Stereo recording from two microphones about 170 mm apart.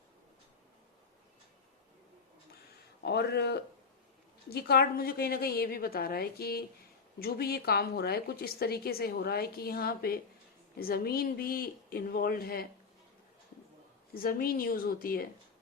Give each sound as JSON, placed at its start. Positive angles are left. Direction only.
{"t": 3.0, "sound": "a man's voice", "side_deg": 75}
{"t": 14.1, "sound": "a woman's voice", "side_deg": 60}